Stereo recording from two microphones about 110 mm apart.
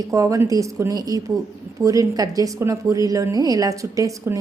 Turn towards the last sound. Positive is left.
turn(degrees=-30)  # may be behind; listen again after turning